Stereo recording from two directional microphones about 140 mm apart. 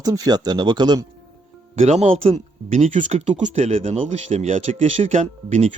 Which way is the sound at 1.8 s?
50° right (ahead or behind).